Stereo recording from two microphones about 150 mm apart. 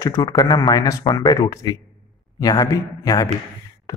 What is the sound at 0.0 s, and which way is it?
Speech, 20° left (ahead or behind).